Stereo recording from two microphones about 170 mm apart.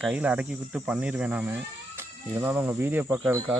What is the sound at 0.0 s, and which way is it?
Speech, 5° right (ahead or behind).